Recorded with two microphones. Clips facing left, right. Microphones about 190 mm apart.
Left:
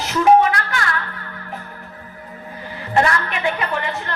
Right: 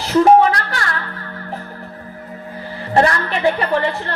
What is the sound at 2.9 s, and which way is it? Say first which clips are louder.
A woman's voice: right 3 dB; 35° right (ahead or behind).